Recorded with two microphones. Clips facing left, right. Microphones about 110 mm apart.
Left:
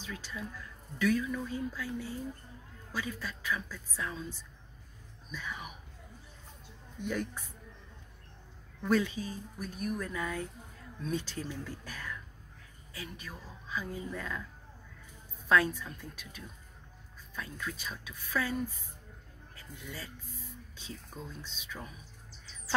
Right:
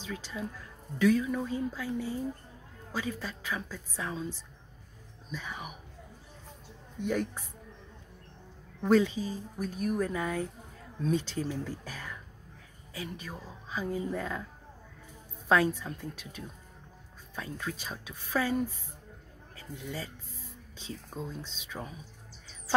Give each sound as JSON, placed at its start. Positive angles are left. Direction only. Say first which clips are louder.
{"t": 0.0, "sound": "speech", "louder": "right 4 dB", "side_deg": -25}
{"t": 7.1, "sound": "speech", "louder": "right 4 dB", "side_deg": -25}
{"t": 8.8, "sound": "speech", "louder": "right 5 dB", "side_deg": -25}
{"t": 11.8, "sound": "throat clearing", "louder": "even", "side_deg": -30}
{"t": 12.9, "sound": "speech", "louder": "right 5 dB", "side_deg": -30}
{"t": 15.4, "sound": "speech", "louder": "right 2 dB", "side_deg": -25}